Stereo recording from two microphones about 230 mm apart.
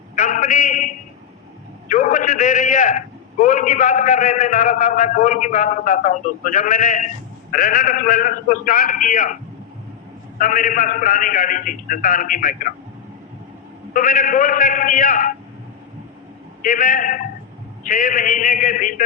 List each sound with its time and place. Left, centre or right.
0.2 s a sound: left
1.9 s a man's voice: left
10.3 s a man's voice: left
13.9 s a man's voice: left
16.6 s a man's voice: left